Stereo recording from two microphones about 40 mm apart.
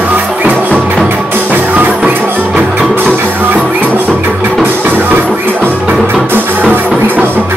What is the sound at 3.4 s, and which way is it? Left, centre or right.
Music, right.